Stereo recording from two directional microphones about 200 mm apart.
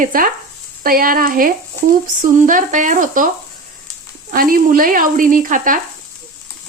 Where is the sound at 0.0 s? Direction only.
45° right (ahead or behind).